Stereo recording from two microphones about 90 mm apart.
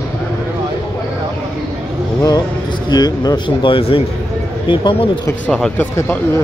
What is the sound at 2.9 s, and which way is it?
Speech, 50° left (ahead or behind).